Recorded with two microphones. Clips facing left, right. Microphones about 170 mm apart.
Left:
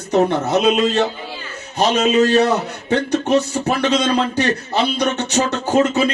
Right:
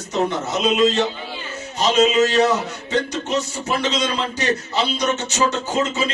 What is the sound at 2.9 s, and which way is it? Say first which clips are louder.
A man's voice: left 6 dB; 60° left (ahead or behind).